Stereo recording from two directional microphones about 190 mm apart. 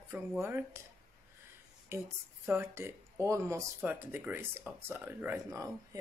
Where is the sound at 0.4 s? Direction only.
10° right (ahead or behind).